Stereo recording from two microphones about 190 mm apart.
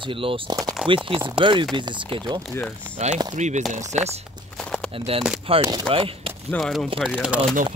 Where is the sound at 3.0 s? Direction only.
35° right (ahead or behind).